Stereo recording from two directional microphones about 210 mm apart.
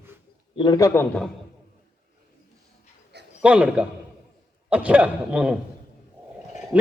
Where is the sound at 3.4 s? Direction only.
5° right (ahead or behind).